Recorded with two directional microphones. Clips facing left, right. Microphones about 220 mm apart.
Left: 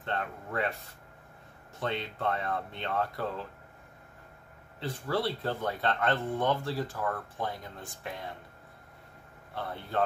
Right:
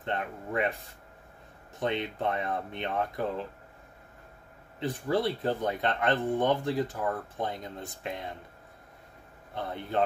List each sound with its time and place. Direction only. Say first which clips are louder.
0.0 s speech: right 2 dB; 15° right (ahead or behind)
1.8 s speech: right 3 dB; 20° right (ahead or behind)
4.7 s speech: right 3 dB; 20° right (ahead or behind)
9.6 s speech: right 2 dB; 20° right (ahead or behind)